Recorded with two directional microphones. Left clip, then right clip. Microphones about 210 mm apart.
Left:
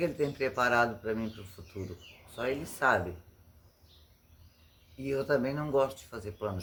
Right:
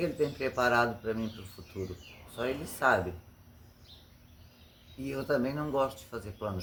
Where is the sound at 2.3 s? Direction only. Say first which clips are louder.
Left 1 dB; 40° left (ahead or behind).